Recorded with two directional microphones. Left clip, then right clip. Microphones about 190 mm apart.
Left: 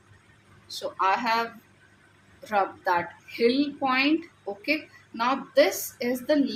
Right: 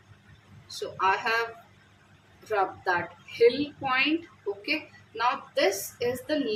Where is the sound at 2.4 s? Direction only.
50° left (ahead or behind).